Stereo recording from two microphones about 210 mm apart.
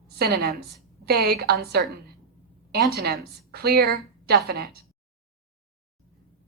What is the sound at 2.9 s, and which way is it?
A woman's voice, 50° right (ahead or behind).